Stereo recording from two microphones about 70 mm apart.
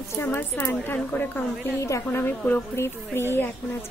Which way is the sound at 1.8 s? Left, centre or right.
Left.